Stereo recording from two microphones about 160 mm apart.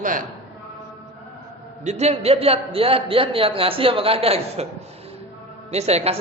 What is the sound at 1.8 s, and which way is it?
A man's voice, 45° right (ahead or behind).